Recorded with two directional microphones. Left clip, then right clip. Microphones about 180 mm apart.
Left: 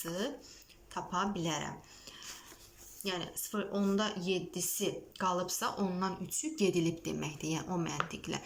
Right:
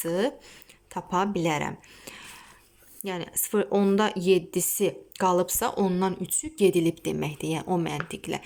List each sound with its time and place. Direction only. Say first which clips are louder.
0.0 s a woman's voice: right 11 dB; 30° right (ahead or behind)